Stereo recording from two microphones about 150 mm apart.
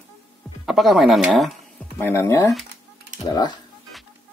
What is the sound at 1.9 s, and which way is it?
Speech, 15° left (ahead or behind).